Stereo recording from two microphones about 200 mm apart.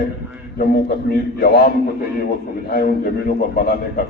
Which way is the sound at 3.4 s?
50° left (ahead or behind).